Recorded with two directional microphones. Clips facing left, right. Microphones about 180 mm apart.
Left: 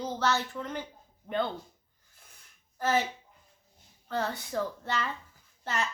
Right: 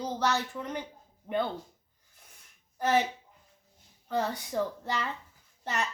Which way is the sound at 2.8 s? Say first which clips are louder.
Right 2 dB; 15° right (ahead or behind).